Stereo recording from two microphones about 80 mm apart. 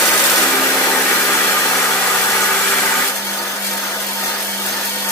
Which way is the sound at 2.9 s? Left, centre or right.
Left.